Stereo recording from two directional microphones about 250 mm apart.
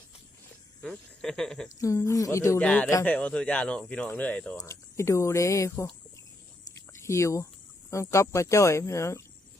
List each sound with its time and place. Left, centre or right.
0.8 s speech: centre
6.7 s a sound: centre
7.9 s speech: centre